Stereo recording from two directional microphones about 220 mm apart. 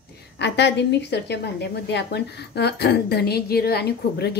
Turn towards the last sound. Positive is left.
turn(degrees=50)  # may be behind; listen again after turning